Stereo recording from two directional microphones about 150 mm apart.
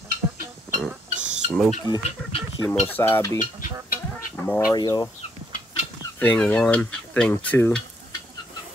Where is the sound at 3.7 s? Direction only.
20° right (ahead or behind).